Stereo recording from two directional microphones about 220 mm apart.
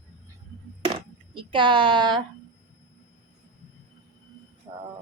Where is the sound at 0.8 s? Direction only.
25° right (ahead or behind).